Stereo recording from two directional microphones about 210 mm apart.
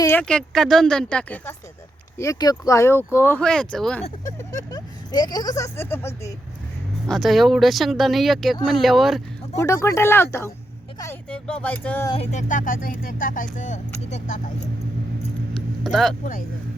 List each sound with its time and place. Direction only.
0.0 s speech: 10° left (ahead or behind)
4.5 s speech: 20° left (ahead or behind)
7.1 s speech: centre (ahead or behind)
9.6 s speech: 15° left (ahead or behind)
12.1 s speech: 35° left (ahead or behind)
15.8 s speech: centre (ahead or behind)